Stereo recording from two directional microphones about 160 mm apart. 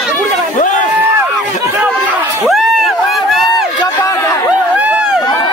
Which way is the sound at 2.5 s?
Centre (ahead or behind).